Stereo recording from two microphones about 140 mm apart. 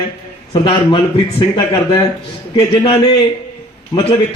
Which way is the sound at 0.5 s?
35° left (ahead or behind).